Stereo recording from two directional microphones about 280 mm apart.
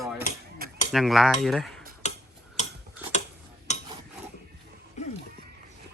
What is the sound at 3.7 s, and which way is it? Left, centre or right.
Stir, left.